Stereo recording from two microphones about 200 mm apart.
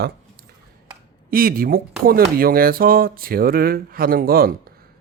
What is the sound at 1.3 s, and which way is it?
Speech, 45° right (ahead or behind).